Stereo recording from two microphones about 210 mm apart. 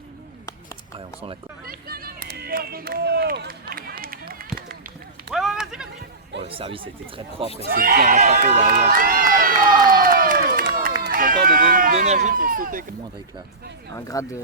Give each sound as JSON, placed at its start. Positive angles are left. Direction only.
{"t": 0.9, "sound": "a sound", "side_deg": -25}
{"t": 1.6, "sound": "run", "side_deg": -45}
{"t": 5.3, "sound": "run", "side_deg": 0}
{"t": 6.4, "sound": "speech", "side_deg": -25}
{"t": 7.6, "sound": "speech", "side_deg": -45}
{"t": 8.4, "sound": "run", "side_deg": -35}
{"t": 10.0, "sound": "crowd", "side_deg": -40}
{"t": 11.0, "sound": "speech", "side_deg": -40}
{"t": 13.9, "sound": "speech", "side_deg": 15}